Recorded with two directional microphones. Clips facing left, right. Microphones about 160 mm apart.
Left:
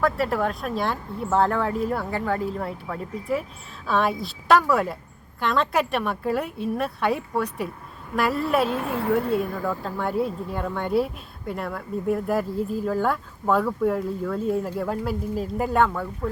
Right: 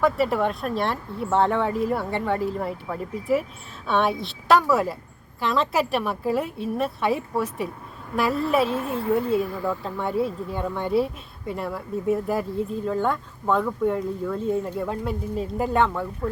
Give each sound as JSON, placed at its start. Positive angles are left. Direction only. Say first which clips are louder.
{"t": 0.0, "sound": "speech", "louder": "right 2 dB", "side_deg": 0}
{"t": 8.9, "sound": "a woman's voice", "louder": "even", "side_deg": 75}
{"t": 9.3, "sound": "speech", "louder": "right 1 dB", "side_deg": 0}